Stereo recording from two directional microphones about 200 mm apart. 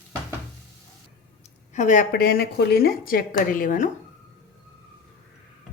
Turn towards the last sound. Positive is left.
turn(degrees=40)  # may be behind; listen again after turning